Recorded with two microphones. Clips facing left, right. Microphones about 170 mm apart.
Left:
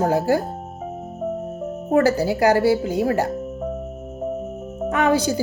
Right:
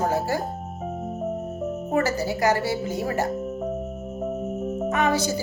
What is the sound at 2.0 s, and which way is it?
Speech, 10° left (ahead or behind).